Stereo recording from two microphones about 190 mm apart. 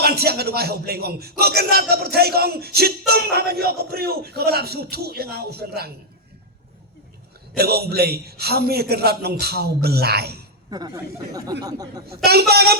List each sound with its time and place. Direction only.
0.0 s speech: 55° right (ahead or behind)
7.5 s speech: 55° right (ahead or behind)
10.7 s speech: 20° right (ahead or behind)
12.0 s speech: 55° right (ahead or behind)